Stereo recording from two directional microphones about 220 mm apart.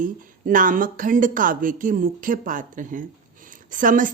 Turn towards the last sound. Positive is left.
turn(degrees=-35)  # may be behind; listen again after turning